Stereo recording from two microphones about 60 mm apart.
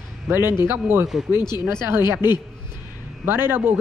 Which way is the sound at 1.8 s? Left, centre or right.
Right.